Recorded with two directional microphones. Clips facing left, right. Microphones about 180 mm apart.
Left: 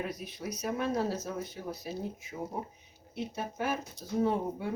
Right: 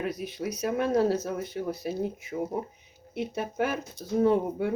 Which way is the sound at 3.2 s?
60° right (ahead or behind).